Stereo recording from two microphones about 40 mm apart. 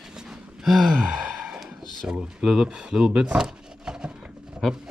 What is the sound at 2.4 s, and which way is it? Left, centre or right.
Speech, centre.